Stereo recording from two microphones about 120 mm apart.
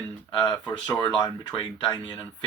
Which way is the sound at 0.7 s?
40° left (ahead or behind).